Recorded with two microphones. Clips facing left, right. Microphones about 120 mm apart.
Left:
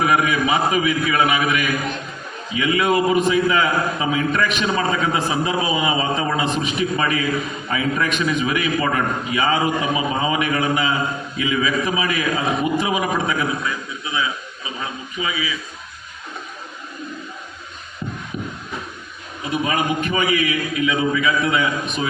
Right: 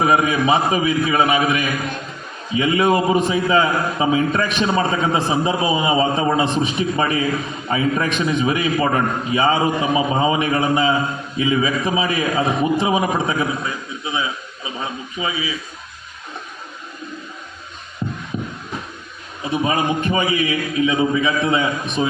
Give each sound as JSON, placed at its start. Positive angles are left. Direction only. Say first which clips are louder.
{"t": 0.0, "sound": "a man's voice", "louder": "right 2 dB", "side_deg": -30}
{"t": 14.8, "sound": "a sound", "louder": "right 2 dB", "side_deg": -30}
{"t": 18.3, "sound": "music", "louder": "right 2 dB", "side_deg": -30}
{"t": 19.6, "sound": "a man's voice", "louder": "right 2 dB", "side_deg": -30}